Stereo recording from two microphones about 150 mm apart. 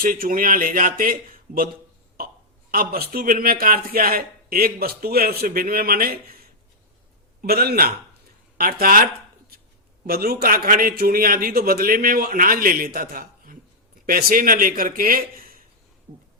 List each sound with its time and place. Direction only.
0.0 s a man's voice: 70° right (ahead or behind)
2.7 s speech: 85° right
7.4 s a man's voice: 90° right
8.5 s a man's voice: 75° right (ahead or behind)
10.1 s a man's voice: 85° right